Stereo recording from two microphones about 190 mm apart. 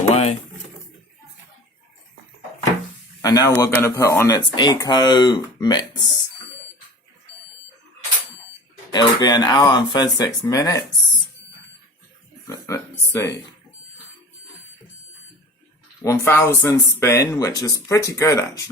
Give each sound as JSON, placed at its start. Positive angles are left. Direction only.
{"t": 0.0, "sound": "pigeon", "side_deg": 35}
{"t": 3.2, "sound": "speech", "side_deg": 15}
{"t": 8.9, "sound": "speech", "side_deg": 20}
{"t": 12.5, "sound": "speech", "side_deg": 15}
{"t": 16.0, "sound": "speech", "side_deg": 10}